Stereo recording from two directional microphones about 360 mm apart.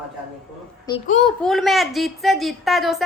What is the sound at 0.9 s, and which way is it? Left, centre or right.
Speech, centre.